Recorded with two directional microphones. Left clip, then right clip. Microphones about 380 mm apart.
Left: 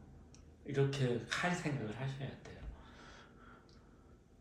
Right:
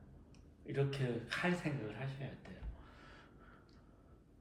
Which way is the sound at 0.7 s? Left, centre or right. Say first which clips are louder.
Left 3 dB; centre.